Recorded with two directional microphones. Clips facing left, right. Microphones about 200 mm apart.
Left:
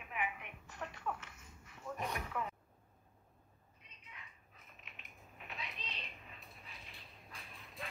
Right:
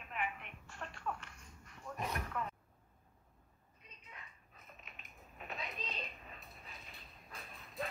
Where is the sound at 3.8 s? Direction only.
40° right (ahead or behind).